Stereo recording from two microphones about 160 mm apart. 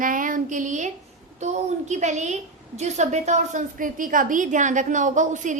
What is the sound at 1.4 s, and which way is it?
A woman's voice, 45° right (ahead or behind).